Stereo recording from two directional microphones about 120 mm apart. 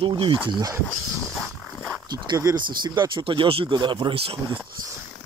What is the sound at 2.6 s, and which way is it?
Speech, 40° right (ahead or behind).